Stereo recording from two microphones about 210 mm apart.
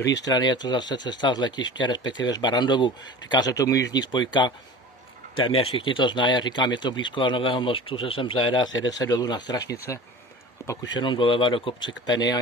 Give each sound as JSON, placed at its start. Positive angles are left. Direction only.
{"t": 0.0, "sound": "speech", "side_deg": 55}
{"t": 0.3, "sound": "speech", "side_deg": 20}
{"t": 5.4, "sound": "speech", "side_deg": 80}
{"t": 5.8, "sound": "speech", "side_deg": 25}